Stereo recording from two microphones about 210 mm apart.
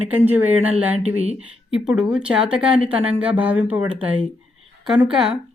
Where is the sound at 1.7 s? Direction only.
5° right (ahead or behind).